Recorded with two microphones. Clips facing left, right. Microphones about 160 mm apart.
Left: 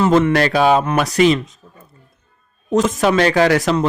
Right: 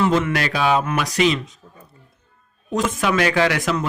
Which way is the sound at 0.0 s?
40° left (ahead or behind).